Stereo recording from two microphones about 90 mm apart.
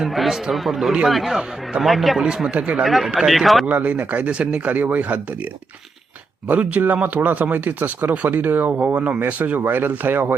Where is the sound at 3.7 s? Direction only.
20° right (ahead or behind).